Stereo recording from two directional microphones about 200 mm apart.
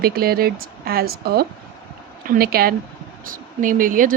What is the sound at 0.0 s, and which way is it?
Speech, 50° right (ahead or behind).